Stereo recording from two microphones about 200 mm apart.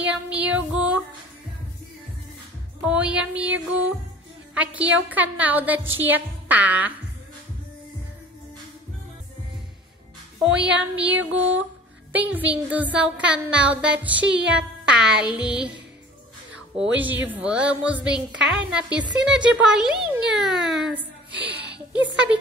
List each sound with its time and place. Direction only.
0.1 s music: 5° right (ahead or behind)
2.8 s music: 5° right (ahead or behind)
4.6 s a woman's voice: 5° right (ahead or behind)
10.4 s a woman's voice: 5° right (ahead or behind)
16.7 s a woman's voice: 5° right (ahead or behind)
21.3 s music: 60° right (ahead or behind)
21.7 s speech: 5° right (ahead or behind)